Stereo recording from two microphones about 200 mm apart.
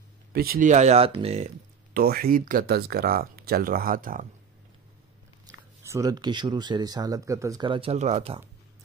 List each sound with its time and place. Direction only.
0.3 s speech: 50° right (ahead or behind); by 1.5 s 30° right (ahead or behind)
2.0 s speech: 50° right (ahead or behind)
5.5 s speech: 15° right (ahead or behind)